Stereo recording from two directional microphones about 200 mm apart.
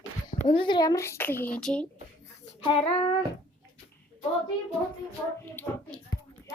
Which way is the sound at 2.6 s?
25° left (ahead or behind).